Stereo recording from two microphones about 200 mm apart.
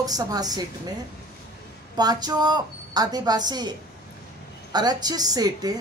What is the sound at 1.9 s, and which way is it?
A woman's voice, 20° right (ahead or behind).